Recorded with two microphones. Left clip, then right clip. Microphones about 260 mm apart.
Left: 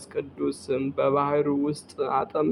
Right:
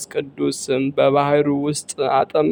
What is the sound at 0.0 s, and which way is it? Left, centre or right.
Speech, right.